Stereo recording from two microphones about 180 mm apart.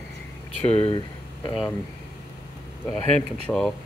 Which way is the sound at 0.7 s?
30° left (ahead or behind).